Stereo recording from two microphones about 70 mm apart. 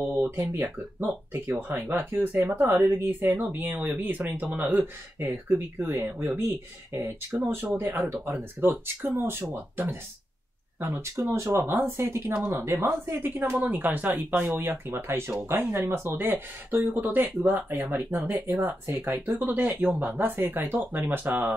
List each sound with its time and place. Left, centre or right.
0.4 s speech: right
6.9 s speech: right
7.3 s speech: right